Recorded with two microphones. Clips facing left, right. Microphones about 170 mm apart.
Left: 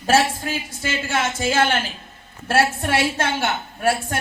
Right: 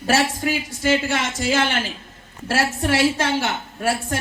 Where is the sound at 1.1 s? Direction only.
55° left (ahead or behind).